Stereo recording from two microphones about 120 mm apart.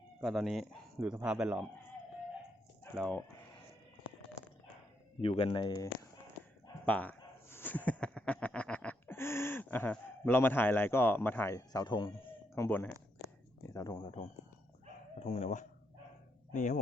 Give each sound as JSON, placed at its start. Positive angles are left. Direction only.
{"t": 0.2, "sound": "speech", "side_deg": 0}
{"t": 3.0, "sound": "speech", "side_deg": 15}
{"t": 5.2, "sound": "speech", "side_deg": 50}
{"t": 6.8, "sound": "a sound", "side_deg": 10}
{"t": 11.5, "sound": "speech", "side_deg": 30}
{"t": 12.5, "sound": "speech", "side_deg": 15}
{"t": 13.7, "sound": "speech", "side_deg": 35}
{"t": 15.2, "sound": "speech", "side_deg": 65}
{"t": 16.5, "sound": "speech", "side_deg": 90}